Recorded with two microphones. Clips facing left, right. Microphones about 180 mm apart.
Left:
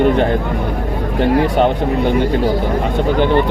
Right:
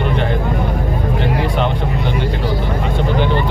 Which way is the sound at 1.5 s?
50° left (ahead or behind).